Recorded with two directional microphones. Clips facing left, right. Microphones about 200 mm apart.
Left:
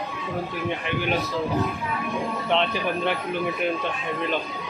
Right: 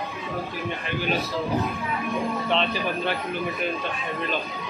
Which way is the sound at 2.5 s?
15° left (ahead or behind).